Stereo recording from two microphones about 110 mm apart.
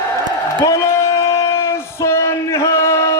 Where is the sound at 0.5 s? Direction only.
30° left (ahead or behind).